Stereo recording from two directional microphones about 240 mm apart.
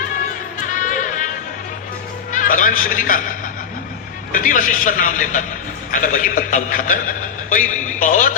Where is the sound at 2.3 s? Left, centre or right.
Left.